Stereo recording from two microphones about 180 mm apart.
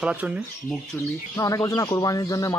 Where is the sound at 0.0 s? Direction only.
5° right (ahead or behind).